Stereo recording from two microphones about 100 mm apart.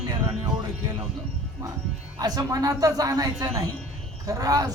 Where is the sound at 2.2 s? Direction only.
40° right (ahead or behind).